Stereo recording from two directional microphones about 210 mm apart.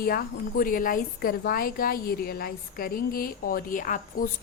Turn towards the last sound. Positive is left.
turn(degrees=40)  # may be behind; listen again after turning